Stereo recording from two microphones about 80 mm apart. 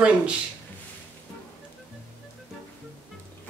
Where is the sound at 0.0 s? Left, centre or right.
Centre.